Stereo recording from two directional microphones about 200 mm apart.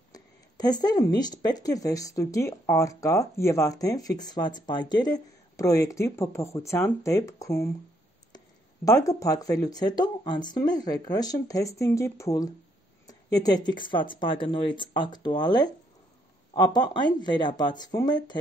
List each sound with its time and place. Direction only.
0.1 s speech: 20° left (ahead or behind)
8.8 s speech: 15° left (ahead or behind)